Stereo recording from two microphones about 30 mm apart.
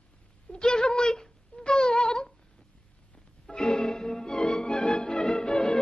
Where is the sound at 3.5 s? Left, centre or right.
Left.